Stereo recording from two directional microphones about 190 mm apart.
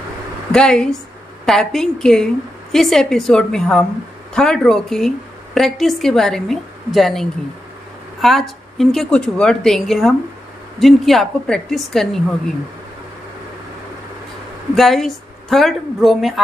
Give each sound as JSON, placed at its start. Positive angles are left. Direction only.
{"t": 0.5, "sound": "a woman's voice", "side_deg": 5}
{"t": 14.8, "sound": "a woman's voice", "side_deg": 0}